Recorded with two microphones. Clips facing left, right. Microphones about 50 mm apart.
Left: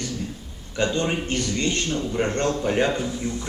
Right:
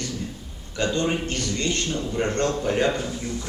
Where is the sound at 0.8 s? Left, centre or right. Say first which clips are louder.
Even; left.